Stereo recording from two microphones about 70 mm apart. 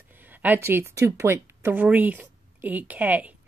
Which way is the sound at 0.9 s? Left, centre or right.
Right.